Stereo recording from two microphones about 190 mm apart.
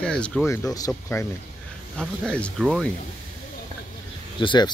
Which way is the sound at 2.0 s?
5° left (ahead or behind).